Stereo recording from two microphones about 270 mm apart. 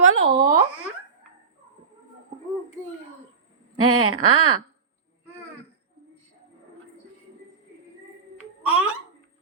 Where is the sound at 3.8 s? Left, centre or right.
Right.